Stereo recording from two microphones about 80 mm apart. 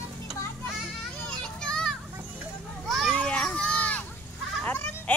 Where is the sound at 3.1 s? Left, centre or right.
Centre.